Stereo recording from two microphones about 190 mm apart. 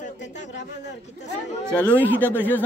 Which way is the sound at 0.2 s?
70° left (ahead or behind).